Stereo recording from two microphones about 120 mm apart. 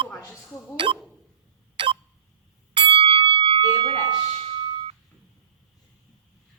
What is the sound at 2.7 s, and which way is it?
Bell, 45° right (ahead or behind).